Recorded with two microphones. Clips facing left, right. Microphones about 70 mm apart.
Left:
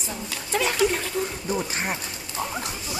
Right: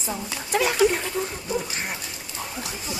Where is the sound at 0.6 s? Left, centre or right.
Centre.